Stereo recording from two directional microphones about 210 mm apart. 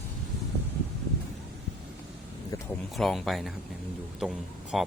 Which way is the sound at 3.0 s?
Centre (ahead or behind).